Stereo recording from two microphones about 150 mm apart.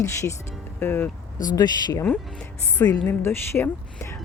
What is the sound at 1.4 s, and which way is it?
Speech, 25° left (ahead or behind).